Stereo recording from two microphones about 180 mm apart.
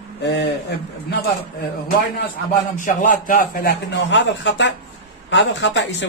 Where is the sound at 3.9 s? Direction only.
85° left.